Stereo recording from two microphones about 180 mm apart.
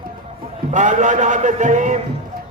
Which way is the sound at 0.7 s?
40° right (ahead or behind).